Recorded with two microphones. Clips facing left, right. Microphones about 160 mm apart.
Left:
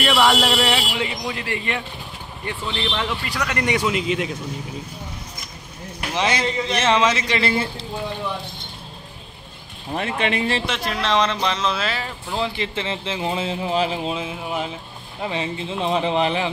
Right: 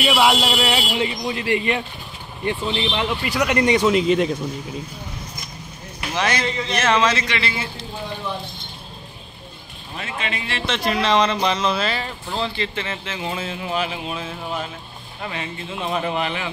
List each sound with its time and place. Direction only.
0.0 s a man's voice: 10° right (ahead or behind)
3.4 s a man's voice: 25° right (ahead or behind)
6.1 s speech: 20° left (ahead or behind)
7.2 s a man's voice: 40° left (ahead or behind)
9.9 s speech: 55° left (ahead or behind)
10.7 s speech: centre (ahead or behind); by 14.1 s 30° left (ahead or behind)
14.1 s speech: 15° left (ahead or behind)